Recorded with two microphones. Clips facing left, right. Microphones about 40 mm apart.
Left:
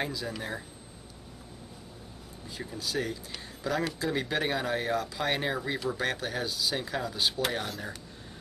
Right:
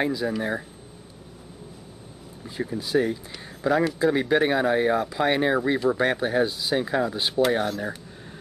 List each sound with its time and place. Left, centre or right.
0.0 s speech: centre
2.4 s speech: right